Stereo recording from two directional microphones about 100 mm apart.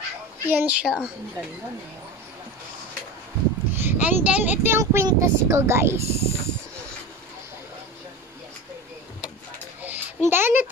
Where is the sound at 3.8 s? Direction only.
20° right (ahead or behind).